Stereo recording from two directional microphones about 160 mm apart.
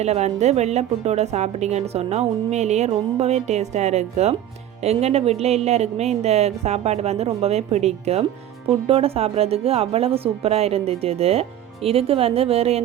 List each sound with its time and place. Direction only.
0.0 s a woman's voice: 45° right (ahead or behind)